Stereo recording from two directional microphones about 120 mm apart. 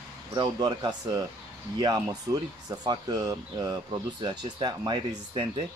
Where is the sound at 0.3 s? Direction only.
35° right (ahead or behind).